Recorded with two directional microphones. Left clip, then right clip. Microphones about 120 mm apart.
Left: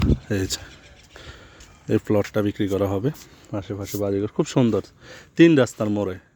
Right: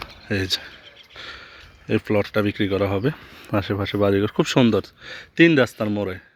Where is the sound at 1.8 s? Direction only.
45° left (ahead or behind).